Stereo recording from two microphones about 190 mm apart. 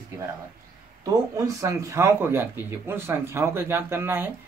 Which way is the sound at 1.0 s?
20° right (ahead or behind).